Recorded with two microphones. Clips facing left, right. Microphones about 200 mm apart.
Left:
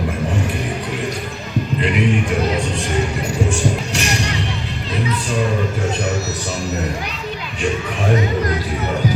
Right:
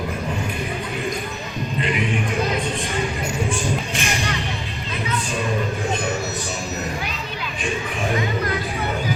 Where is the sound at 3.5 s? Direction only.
75° left (ahead or behind).